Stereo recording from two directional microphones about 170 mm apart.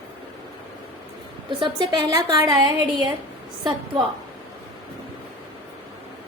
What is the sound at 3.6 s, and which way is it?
Speech, 25° right (ahead or behind).